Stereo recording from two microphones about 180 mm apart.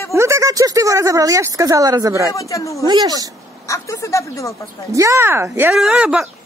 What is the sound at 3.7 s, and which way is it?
Speech, 15° left (ahead or behind).